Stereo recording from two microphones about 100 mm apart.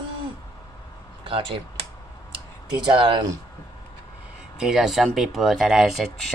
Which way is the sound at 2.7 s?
50° right (ahead or behind).